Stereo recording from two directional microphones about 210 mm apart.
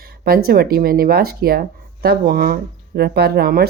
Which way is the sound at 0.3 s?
45° right (ahead or behind).